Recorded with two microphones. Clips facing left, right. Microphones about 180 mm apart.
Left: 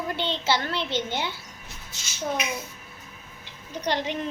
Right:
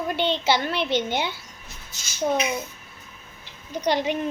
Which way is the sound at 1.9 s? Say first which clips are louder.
Left 1 dB; 40° right (ahead or behind).